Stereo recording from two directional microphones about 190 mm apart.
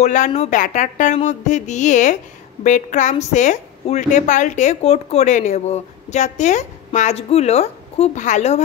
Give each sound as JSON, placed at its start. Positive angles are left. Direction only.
{"t": 0.0, "sound": "a woman's voice", "side_deg": 40}